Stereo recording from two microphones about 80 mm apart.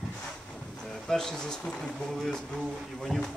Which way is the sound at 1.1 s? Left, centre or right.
Centre.